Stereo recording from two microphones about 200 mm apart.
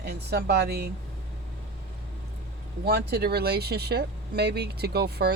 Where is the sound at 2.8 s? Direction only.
50° right (ahead or behind).